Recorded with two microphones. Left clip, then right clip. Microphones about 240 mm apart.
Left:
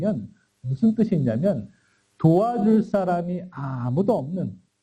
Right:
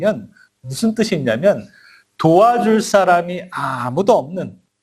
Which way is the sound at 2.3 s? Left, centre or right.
Right.